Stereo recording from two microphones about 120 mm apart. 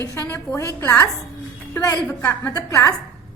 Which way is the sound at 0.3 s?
20° left (ahead or behind).